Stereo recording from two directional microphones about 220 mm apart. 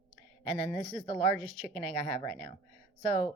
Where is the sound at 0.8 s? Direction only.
35° right (ahead or behind).